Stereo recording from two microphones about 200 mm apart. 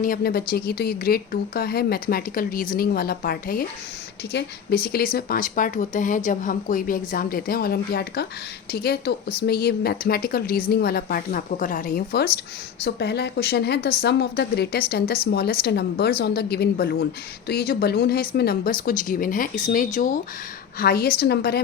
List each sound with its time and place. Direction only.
0.0 s a woman's voice: 45° left (ahead or behind)